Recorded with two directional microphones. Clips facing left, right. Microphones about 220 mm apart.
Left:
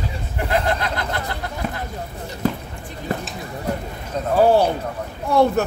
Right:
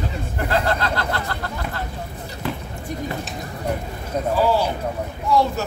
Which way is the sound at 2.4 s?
45° left (ahead or behind).